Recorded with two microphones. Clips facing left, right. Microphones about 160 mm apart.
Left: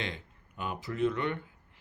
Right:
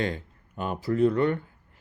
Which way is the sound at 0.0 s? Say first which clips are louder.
Right 9 dB; 45° right (ahead or behind).